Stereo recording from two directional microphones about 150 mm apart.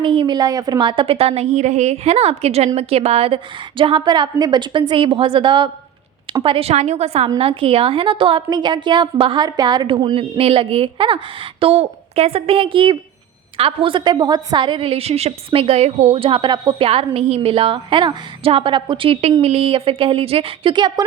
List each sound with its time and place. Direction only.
0.0 s a woman's voice: 35° right (ahead or behind)